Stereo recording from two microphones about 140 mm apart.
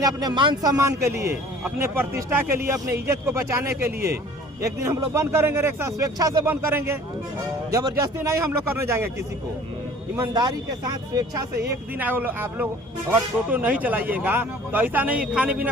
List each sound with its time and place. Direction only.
0.0 s speech: 30° right (ahead or behind); by 15.7 s 10° right (ahead or behind)